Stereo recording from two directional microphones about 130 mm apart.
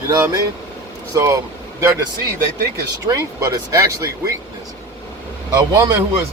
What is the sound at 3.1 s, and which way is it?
Speech, 25° right (ahead or behind).